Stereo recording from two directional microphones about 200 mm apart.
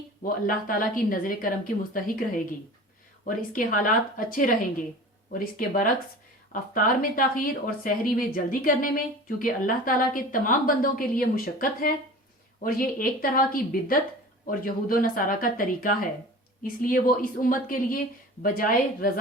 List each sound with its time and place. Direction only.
0.2 s a woman's voice: 45° left (ahead or behind)
3.2 s a woman's voice: 40° left (ahead or behind)